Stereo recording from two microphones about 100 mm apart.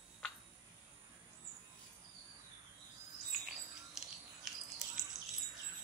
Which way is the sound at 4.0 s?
5° right (ahead or behind).